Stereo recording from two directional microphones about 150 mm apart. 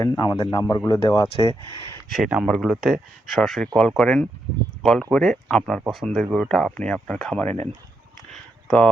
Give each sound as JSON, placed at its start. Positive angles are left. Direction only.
{"t": 0.0, "sound": "a man's voice", "side_deg": 25}
{"t": 2.1, "sound": "speech", "side_deg": -5}
{"t": 8.3, "sound": "a sound", "side_deg": 5}